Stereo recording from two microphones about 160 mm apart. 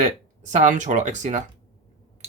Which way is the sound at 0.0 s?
50° right (ahead or behind).